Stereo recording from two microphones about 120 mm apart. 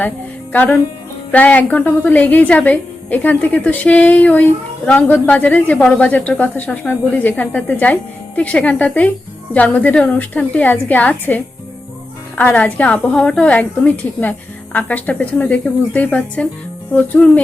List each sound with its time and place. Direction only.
0.5 s a woman's voice: 15° left (ahead or behind)
12.4 s a woman's voice: 15° left (ahead or behind)